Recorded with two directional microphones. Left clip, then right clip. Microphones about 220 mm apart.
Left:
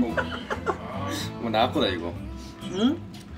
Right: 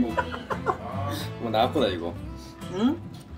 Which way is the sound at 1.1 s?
25° left (ahead or behind).